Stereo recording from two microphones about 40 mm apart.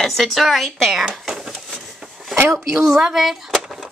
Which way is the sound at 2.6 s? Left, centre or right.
Centre.